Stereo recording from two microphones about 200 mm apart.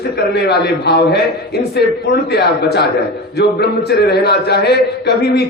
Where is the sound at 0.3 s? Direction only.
55° left (ahead or behind).